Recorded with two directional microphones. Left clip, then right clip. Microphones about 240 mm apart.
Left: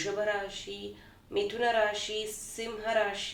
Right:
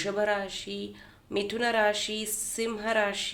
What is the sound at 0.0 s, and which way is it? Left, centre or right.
A woman's voice, right.